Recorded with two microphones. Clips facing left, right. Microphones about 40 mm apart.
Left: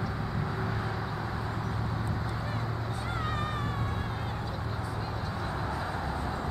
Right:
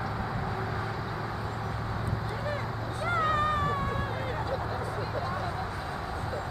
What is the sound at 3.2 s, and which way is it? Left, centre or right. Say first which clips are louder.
Vehicle: right 8 dB; right.